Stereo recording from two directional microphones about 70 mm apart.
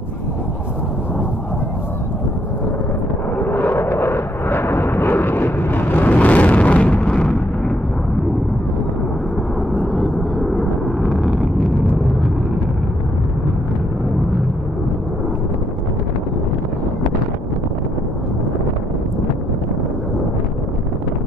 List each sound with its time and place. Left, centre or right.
3.3 s vehicle: left; by 7.7 s centre
9.8 s vehicle: centre